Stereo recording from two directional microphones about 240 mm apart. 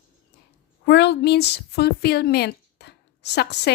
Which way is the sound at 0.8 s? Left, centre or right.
Left.